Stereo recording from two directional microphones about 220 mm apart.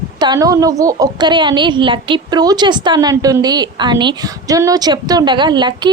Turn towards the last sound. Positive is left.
turn(degrees=-20)  # may be behind; listen again after turning